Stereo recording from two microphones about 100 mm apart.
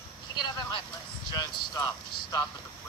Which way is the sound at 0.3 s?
45° left (ahead or behind).